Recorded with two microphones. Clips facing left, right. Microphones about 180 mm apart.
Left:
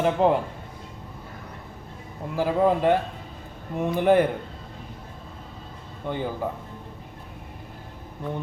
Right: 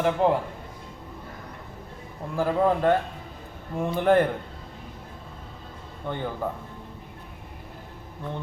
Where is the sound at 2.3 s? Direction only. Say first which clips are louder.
Left 1 dB; 10° left (ahead or behind).